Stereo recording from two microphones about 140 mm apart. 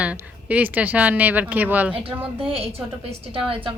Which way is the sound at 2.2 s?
40° right (ahead or behind).